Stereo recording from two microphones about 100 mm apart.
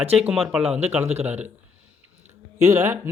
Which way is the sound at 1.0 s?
90° right.